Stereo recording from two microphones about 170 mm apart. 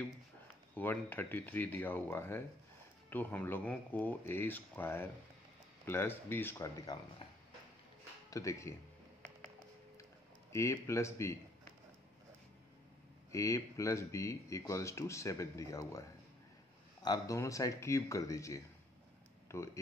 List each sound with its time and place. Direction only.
0.7 s speech: 10° left (ahead or behind)
6.9 s speech: 25° left (ahead or behind)
8.3 s speech: 20° left (ahead or behind)
10.5 s speech: 15° left (ahead or behind)
13.3 s speech: 20° left (ahead or behind)